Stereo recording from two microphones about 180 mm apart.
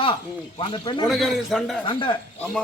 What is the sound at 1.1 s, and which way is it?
Speech, centre (ahead or behind).